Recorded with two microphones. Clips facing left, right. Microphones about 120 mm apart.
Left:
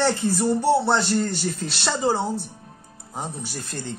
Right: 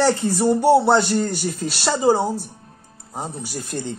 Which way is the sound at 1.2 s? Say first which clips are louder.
Right 2 dB; 5° right (ahead or behind).